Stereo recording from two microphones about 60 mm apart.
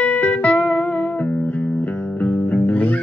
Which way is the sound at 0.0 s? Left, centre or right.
Left.